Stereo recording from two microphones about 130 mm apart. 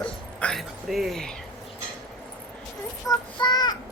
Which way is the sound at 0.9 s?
Centre (ahead or behind).